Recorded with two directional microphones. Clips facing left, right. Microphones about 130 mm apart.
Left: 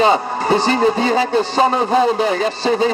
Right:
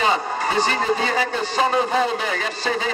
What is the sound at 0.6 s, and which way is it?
A man's voice, 30° left (ahead or behind).